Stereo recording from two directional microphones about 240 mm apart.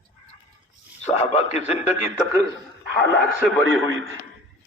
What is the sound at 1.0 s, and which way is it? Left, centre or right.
Speech, left.